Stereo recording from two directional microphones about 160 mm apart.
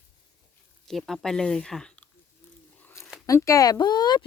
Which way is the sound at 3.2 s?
20° left (ahead or behind).